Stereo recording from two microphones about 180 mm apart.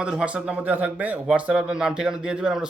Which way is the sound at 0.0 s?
5° right (ahead or behind).